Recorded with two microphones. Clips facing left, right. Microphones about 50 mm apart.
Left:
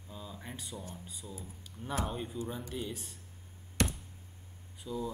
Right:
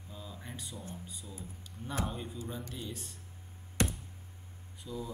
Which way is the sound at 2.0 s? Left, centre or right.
Centre.